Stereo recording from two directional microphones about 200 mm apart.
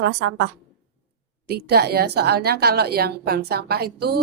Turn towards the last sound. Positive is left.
turn(degrees=-50)  # may be behind; listen again after turning